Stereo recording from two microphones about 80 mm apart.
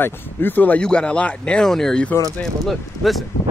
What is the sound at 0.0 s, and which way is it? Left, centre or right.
Speech, left.